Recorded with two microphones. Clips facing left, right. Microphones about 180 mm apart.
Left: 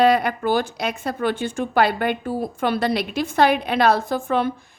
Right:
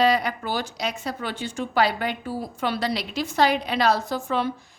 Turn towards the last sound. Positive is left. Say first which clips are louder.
# left 4 dB
turn(degrees=55)  # may be behind; listen again after turning